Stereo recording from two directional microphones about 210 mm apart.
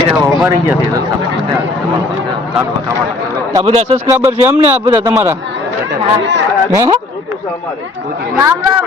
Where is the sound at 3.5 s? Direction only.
20° right (ahead or behind).